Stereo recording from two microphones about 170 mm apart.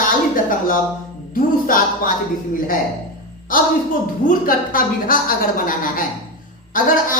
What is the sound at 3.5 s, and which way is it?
A woman's voice, 55° left (ahead or behind).